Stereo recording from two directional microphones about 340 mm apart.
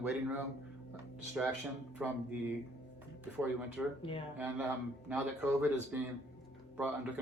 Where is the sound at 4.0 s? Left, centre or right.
Centre.